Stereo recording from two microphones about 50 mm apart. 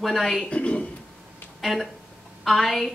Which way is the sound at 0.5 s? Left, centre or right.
Left.